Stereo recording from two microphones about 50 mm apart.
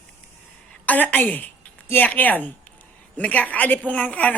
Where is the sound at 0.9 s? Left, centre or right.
Left.